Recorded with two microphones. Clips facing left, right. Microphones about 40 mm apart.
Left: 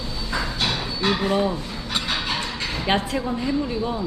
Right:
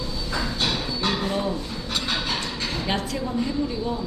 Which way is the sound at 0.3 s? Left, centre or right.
Centre.